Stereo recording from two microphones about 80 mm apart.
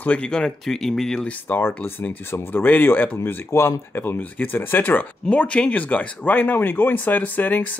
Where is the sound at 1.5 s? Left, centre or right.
Left.